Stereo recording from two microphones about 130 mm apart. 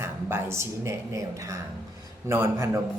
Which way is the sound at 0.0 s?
20° right (ahead or behind).